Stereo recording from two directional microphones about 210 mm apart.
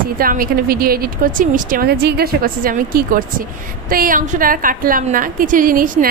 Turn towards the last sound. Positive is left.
turn(degrees=-40)  # may be behind; listen again after turning